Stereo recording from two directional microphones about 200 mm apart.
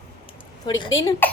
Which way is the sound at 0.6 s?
20° left (ahead or behind).